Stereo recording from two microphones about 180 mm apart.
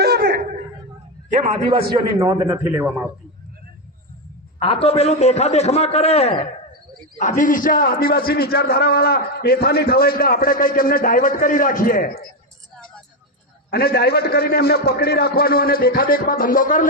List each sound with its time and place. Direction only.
0.0 s laughter: 60° right (ahead or behind)
1.3 s a man's voice: 35° right (ahead or behind); by 3.1 s 10° right (ahead or behind)
4.6 s a man's voice: 30° left (ahead or behind)
7.2 s a man's voice: 45° left (ahead or behind)
13.7 s a man's voice: 60° left (ahead or behind)